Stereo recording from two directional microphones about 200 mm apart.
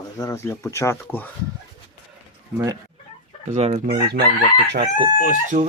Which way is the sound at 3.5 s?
35° right (ahead or behind).